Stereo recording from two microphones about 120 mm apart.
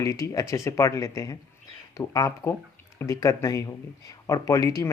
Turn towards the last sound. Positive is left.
turn(degrees=25)  # may be behind; listen again after turning